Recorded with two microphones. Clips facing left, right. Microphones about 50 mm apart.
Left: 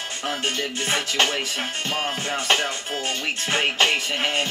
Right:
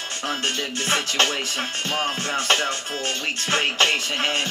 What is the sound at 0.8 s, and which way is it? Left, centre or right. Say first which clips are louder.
Music: right 1 dB; centre.